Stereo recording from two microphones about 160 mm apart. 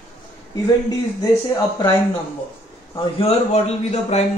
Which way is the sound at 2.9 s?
40° left (ahead or behind).